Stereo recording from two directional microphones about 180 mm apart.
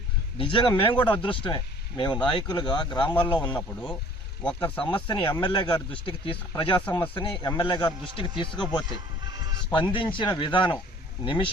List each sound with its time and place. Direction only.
0.3 s speech: 30° left (ahead or behind)
4.8 s speech: 25° left (ahead or behind)
8.9 s music: 20° right (ahead or behind)
9.7 s speech: 25° left (ahead or behind)